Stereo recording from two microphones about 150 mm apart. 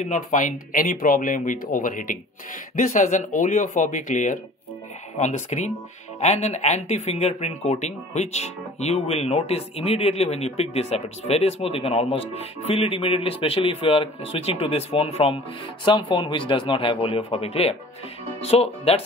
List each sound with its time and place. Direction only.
0.0 s speech: 55° left (ahead or behind)